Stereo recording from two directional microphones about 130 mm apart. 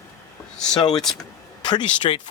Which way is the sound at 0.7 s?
30° left (ahead or behind).